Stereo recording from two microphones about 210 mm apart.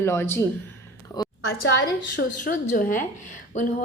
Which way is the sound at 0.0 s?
10° left (ahead or behind).